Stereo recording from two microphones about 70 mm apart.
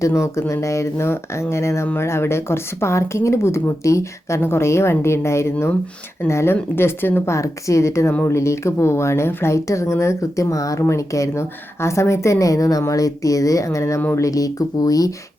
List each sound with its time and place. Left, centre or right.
0.0 s speech: left
7.3 s speech: left